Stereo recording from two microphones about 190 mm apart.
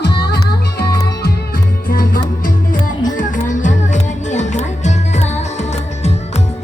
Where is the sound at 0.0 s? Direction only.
60° left (ahead or behind).